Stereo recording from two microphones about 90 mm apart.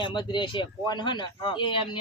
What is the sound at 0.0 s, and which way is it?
Speech, 60° left (ahead or behind).